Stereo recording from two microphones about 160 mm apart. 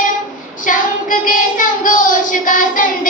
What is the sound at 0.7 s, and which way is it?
Child singing, 55° left (ahead or behind).